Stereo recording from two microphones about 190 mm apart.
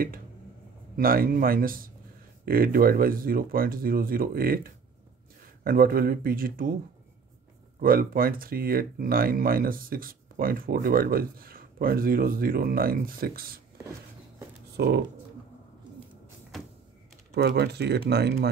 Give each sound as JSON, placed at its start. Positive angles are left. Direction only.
{"t": 0.9, "sound": "speech", "side_deg": -50}
{"t": 7.8, "sound": "speech", "side_deg": -50}
{"t": 14.8, "sound": "speech", "side_deg": -65}
{"t": 17.3, "sound": "speech", "side_deg": -60}